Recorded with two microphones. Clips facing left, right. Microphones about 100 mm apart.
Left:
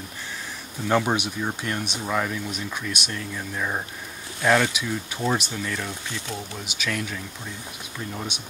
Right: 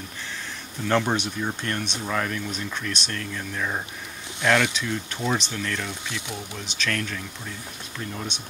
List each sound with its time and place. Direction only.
0.8 s speech: 10° left (ahead or behind)